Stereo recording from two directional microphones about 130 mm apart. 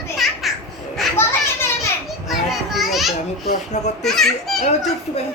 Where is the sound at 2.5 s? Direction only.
Centre (ahead or behind).